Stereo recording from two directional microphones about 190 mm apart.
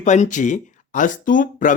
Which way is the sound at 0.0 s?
40° left (ahead or behind).